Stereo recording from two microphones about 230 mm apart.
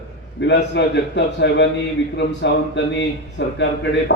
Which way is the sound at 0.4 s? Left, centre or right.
Left.